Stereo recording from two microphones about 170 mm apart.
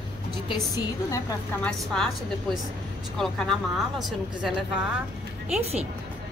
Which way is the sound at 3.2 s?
Centre (ahead or behind).